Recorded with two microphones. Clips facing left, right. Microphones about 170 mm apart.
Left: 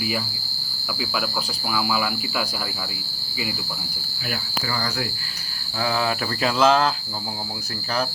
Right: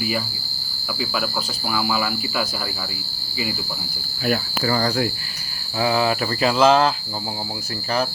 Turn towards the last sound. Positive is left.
turn(degrees=0)  # may be behind; listen again after turning